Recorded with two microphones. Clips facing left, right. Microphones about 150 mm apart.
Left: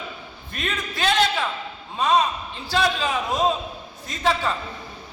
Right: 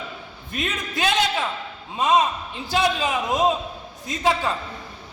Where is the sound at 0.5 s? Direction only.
20° right (ahead or behind).